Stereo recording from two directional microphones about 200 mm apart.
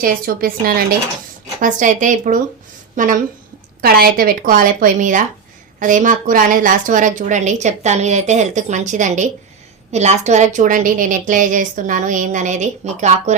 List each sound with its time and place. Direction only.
0.0 s a woman's voice: 45° right (ahead or behind)